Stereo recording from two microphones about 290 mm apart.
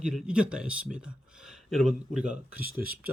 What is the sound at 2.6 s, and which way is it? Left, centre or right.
Speech, left.